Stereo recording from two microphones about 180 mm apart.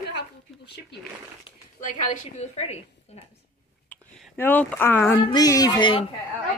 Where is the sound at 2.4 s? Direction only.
35° left (ahead or behind).